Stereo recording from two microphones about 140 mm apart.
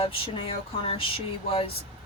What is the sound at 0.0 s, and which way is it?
Speech, 40° left (ahead or behind).